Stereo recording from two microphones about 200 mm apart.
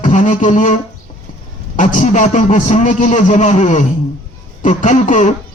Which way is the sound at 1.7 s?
40° left (ahead or behind).